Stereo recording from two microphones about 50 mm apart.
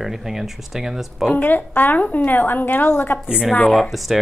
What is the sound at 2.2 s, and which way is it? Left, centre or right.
A woman's voice, left.